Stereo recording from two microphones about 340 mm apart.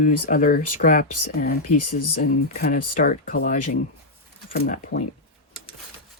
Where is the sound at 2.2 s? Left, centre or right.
Left.